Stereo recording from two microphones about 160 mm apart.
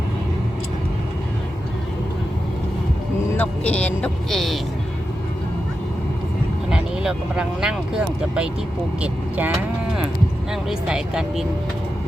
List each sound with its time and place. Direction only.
3.3 s speech: 10° left (ahead or behind)
6.7 s speech: 5° right (ahead or behind)